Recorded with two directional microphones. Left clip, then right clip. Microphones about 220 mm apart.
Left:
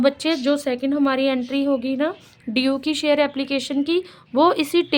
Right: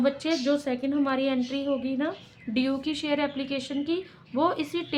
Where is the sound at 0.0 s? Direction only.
55° left (ahead or behind).